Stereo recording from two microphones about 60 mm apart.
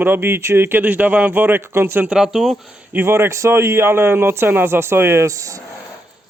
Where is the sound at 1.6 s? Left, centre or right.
Right.